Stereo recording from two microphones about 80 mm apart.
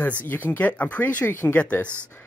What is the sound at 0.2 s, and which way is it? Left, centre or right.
Speech, left.